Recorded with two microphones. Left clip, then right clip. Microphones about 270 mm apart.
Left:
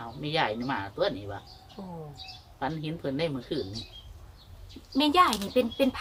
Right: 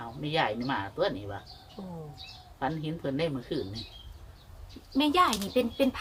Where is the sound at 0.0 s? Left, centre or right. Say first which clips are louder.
Left 1 dB; centre.